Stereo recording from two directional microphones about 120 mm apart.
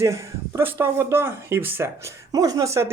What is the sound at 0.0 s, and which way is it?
Speech, 25° right (ahead or behind).